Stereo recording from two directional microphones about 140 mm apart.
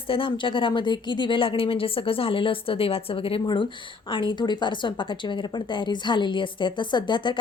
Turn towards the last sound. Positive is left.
turn(degrees=35)  # may be behind; listen again after turning